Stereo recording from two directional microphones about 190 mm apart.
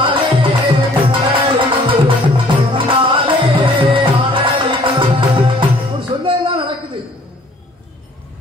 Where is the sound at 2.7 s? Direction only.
30° right (ahead or behind).